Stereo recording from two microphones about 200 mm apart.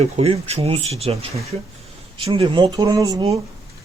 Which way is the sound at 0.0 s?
30° right (ahead or behind).